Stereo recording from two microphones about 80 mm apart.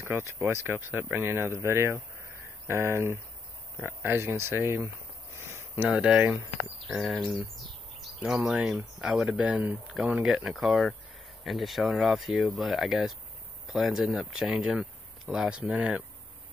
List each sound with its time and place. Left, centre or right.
0.0 s speech: right
5.4 s a sound: right
5.9 s speech: centre
7.0 s speech: centre
8.3 s speech: centre
15.7 s speech: centre